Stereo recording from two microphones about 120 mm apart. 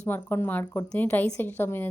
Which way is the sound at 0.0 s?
20° left (ahead or behind).